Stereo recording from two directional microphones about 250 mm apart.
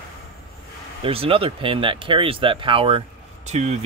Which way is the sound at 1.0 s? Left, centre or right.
Right.